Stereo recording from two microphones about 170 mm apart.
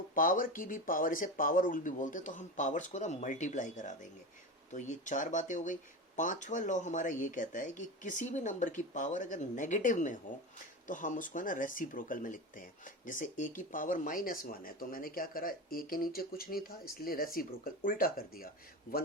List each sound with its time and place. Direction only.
0.1 s speech: 55° left (ahead or behind)